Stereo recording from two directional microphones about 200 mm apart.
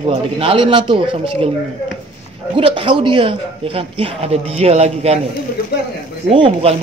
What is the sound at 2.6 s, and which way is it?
A man's voice, 25° right (ahead or behind).